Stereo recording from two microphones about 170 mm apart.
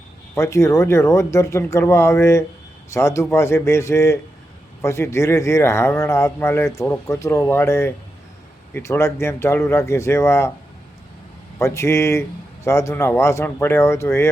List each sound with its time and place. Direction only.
0.3 s speech: 15° left (ahead or behind)
11.6 s speech: 15° left (ahead or behind)